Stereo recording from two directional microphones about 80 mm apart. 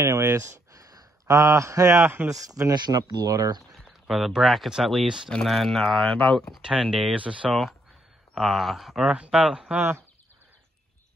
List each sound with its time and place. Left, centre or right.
0.0 s speech: right
2.7 s speech: right
4.1 s speech: centre
6.6 s speech: centre
8.4 s speech: centre
9.8 s speech: right